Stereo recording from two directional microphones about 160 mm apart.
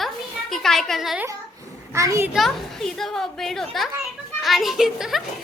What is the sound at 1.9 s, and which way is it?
Speech, 20° right (ahead or behind).